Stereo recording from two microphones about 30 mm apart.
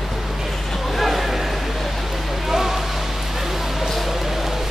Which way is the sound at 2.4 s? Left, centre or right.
Centre.